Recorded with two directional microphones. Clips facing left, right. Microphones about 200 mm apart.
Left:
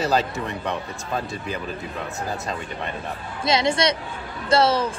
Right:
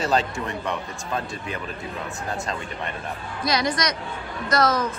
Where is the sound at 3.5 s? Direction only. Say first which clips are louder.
Left 4 dB; 25° left (ahead or behind).